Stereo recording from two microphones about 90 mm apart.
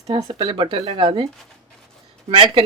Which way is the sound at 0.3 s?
65° right (ahead or behind).